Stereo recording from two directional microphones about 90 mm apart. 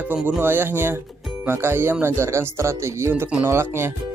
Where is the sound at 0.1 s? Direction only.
25° right (ahead or behind).